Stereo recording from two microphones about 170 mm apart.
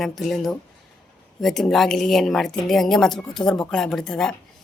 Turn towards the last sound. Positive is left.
turn(degrees=5)  # may be behind; listen again after turning